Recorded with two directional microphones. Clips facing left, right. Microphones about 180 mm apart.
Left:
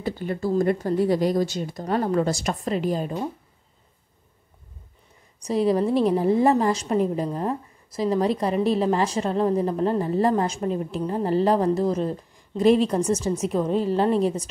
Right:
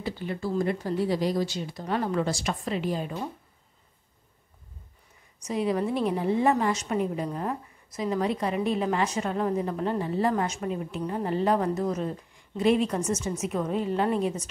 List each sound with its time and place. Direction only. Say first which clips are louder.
0.0 s speech: left 5 dB; 45° left (ahead or behind)
5.4 s a woman's voice: left 6 dB; 35° left (ahead or behind)